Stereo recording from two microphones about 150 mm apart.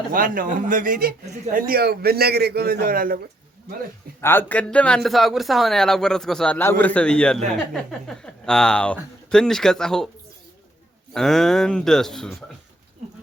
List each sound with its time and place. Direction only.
0.1 s a man's voice: 65° right (ahead or behind)
4.2 s speech: 15° left (ahead or behind)
11.1 s speech: 5° left (ahead or behind)